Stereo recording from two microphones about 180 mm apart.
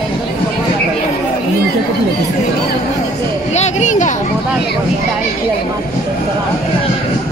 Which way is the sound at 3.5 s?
40° left (ahead or behind).